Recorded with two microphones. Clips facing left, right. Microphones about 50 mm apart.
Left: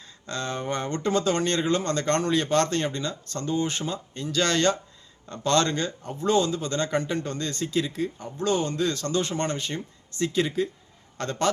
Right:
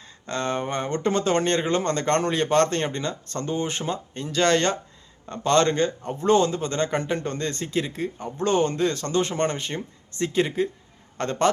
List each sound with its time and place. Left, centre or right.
0.3 s a man's voice: right